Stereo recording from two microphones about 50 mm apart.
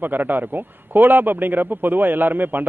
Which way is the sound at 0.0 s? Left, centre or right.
Right.